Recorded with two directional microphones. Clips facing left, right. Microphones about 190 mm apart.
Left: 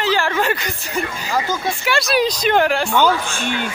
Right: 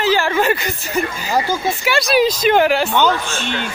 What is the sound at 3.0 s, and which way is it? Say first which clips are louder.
Speech: even; 10° left (ahead or behind).